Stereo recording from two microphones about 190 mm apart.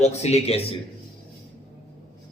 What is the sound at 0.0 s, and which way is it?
Speech, 35° left (ahead or behind).